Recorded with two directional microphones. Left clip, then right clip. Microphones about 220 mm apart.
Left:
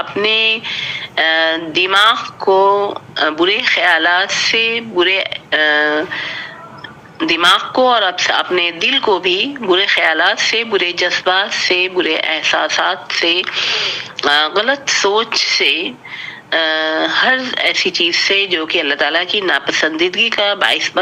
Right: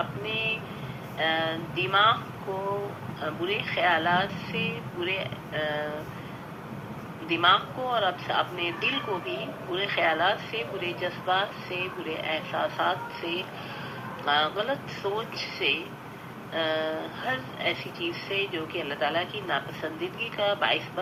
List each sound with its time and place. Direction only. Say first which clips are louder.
0.2 s a man's voice: left 16 dB; 50° left (ahead or behind)
3.2 s a man's voice: left 16 dB; 55° left (ahead or behind)
7.3 s a man's voice: left 10 dB; 55° left (ahead or behind)